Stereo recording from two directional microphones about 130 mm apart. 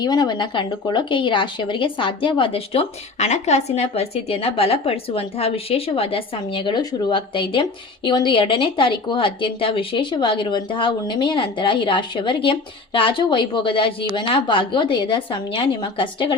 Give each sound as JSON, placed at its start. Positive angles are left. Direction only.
{"t": 0.0, "sound": "speech", "side_deg": 30}